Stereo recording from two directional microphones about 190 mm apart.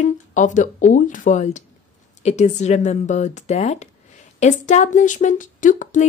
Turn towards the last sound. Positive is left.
turn(degrees=40)  # may be behind; listen again after turning